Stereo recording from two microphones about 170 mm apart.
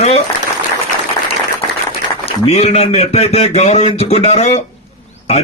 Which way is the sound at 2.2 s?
35° left (ahead or behind).